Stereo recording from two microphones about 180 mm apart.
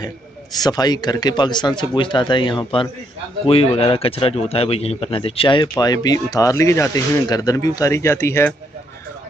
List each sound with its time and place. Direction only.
0.6 s speech: 20° left (ahead or behind)